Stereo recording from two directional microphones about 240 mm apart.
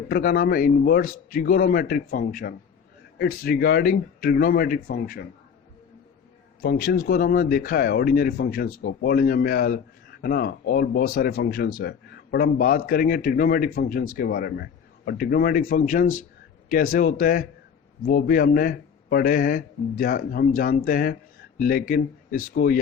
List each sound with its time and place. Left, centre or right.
0.1 s speech: left
6.6 s speech: left